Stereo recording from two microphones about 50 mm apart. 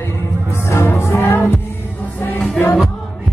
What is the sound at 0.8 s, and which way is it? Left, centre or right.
Music, left.